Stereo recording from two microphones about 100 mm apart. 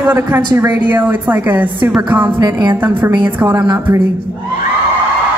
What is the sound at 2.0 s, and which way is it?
Music, 20° right (ahead or behind).